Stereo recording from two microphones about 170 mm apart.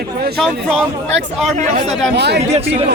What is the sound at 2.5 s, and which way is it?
Speech, 35° right (ahead or behind).